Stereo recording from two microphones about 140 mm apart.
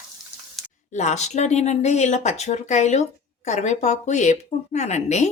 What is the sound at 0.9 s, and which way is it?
Speech, 55° left (ahead or behind).